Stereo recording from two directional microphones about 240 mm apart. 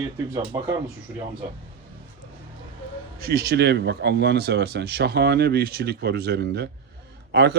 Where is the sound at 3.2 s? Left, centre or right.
Right.